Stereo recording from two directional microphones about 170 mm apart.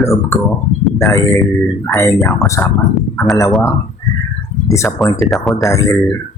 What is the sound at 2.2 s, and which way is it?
Speech, 15° left (ahead or behind).